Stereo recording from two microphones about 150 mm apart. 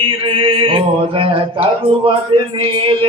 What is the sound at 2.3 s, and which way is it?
Mantra, 35° right (ahead or behind).